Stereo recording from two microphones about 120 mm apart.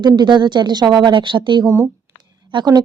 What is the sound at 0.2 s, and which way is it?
A woman's voice, 40° right (ahead or behind).